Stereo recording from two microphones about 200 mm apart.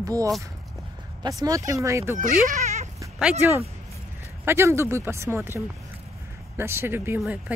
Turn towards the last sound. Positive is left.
turn(degrees=-10)  # may be behind; listen again after turning